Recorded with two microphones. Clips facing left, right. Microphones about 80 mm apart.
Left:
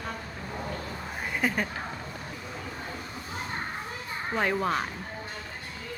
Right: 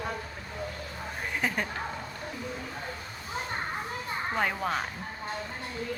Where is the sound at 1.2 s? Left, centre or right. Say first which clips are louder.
Left 2 dB; centre.